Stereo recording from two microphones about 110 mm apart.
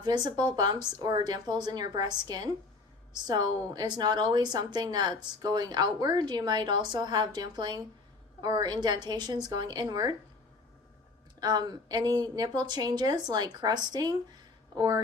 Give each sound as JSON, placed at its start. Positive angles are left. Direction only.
{"t": 0.0, "sound": "a woman's voice", "side_deg": -40}
{"t": 11.3, "sound": "a woman's voice", "side_deg": -40}